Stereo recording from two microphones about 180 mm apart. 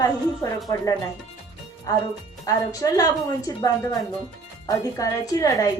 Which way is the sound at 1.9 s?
20° left (ahead or behind).